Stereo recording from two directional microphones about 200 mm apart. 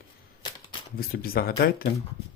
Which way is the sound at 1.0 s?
50° left (ahead or behind).